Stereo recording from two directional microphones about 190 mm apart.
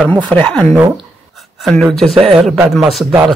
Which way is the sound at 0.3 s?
5° left (ahead or behind).